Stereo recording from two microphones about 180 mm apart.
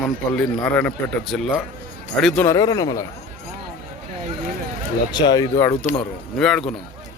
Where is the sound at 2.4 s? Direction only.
20° left (ahead or behind).